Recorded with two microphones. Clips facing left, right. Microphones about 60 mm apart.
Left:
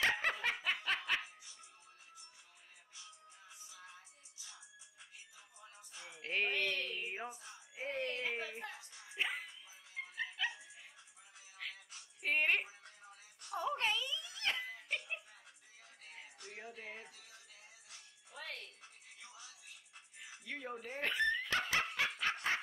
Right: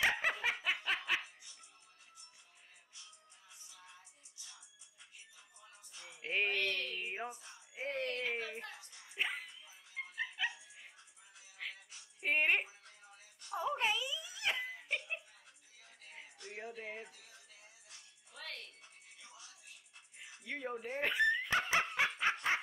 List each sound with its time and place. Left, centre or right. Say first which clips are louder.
0.0 s snicker: right 1 dB; centre
5.6 s music: left 2 dB; left
6.2 s a sound: right 1 dB; centre
6.5 s a sound: right 1 dB; centre
7.0 s a sound: right 1 dB; centre
8.4 s music: right 1 dB; centre
13.5 s wail: right 1 dB; centre
16.5 s music: right 4 dB; centre
18.3 s music: left 1 dB; centre
20.4 s dog: right 3 dB; centre